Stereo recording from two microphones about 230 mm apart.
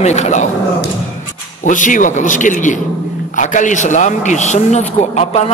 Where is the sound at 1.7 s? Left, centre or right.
Left.